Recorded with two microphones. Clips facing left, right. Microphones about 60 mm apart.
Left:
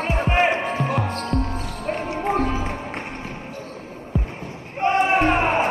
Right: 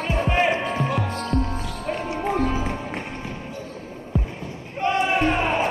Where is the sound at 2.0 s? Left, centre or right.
Left.